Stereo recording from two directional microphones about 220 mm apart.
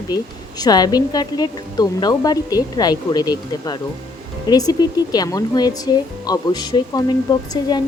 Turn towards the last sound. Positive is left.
turn(degrees=20)  # may be behind; listen again after turning